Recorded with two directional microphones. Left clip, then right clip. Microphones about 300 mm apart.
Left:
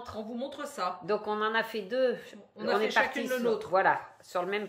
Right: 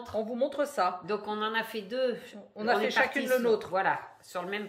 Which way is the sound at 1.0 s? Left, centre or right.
Centre.